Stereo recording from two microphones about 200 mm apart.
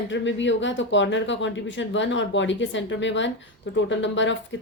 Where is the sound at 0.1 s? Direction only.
65° left (ahead or behind).